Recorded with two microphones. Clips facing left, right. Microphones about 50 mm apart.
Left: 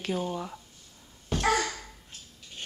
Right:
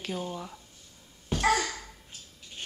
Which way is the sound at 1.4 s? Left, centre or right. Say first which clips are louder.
Even; centre.